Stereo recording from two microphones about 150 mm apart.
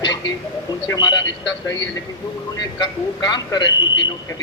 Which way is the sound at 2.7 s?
25° left (ahead or behind).